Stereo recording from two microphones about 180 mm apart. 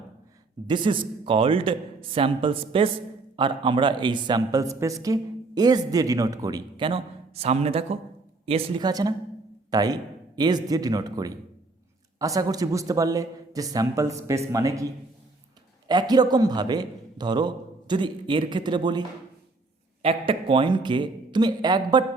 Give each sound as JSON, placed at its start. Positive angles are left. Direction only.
{"t": 0.7, "sound": "a man's voice", "side_deg": -25}
{"t": 15.9, "sound": "a man's voice", "side_deg": -25}